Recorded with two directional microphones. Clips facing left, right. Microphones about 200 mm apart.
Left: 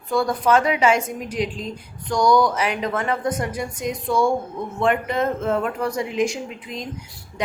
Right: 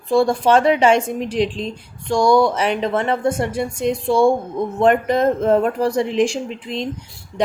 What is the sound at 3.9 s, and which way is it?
Music, 30° right (ahead or behind).